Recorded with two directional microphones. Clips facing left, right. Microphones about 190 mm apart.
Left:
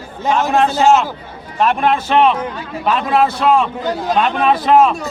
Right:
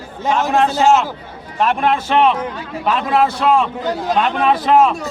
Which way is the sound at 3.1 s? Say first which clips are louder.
Left 1 dB; 5° left (ahead or behind).